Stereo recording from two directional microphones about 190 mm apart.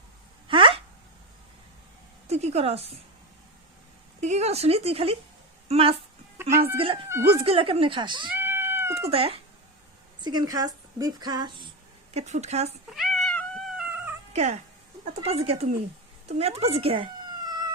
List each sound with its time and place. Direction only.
0.4 s a sound: 25° right (ahead or behind)
2.2 s a woman's voice: 35° right (ahead or behind)
4.2 s speech: 35° right (ahead or behind)
8.3 s cat: 10° right (ahead or behind)
9.0 s speech: 30° right (ahead or behind)
12.1 s speech: 35° right (ahead or behind)
12.9 s cat: centre (ahead or behind)
14.3 s speech: 35° right (ahead or behind)
16.4 s cat: 30° right (ahead or behind)